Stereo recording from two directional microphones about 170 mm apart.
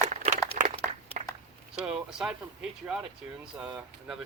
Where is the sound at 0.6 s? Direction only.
45° right (ahead or behind).